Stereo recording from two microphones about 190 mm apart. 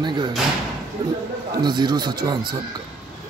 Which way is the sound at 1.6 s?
25° right (ahead or behind).